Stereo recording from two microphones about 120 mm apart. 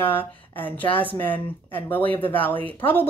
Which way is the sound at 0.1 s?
15° left (ahead or behind).